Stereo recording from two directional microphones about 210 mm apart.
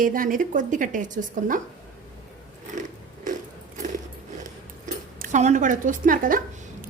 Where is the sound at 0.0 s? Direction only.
40° right (ahead or behind).